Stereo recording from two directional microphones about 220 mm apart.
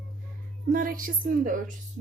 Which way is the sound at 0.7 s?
40° right (ahead or behind).